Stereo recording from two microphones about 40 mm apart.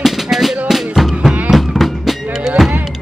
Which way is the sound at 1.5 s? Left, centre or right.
Centre.